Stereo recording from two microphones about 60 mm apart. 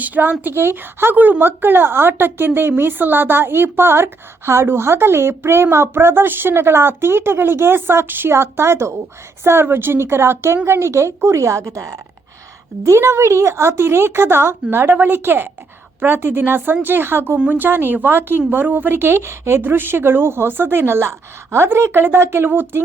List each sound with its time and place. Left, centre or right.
0.0 s a woman's voice: right
12.8 s a woman's voice: right